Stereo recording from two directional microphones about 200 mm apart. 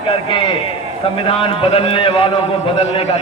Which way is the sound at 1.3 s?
25° left (ahead or behind).